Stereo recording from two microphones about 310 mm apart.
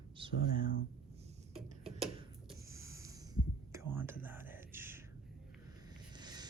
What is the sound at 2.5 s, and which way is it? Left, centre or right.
Whispering, centre.